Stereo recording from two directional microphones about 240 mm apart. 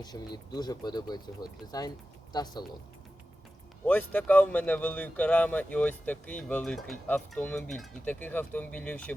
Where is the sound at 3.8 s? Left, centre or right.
Centre.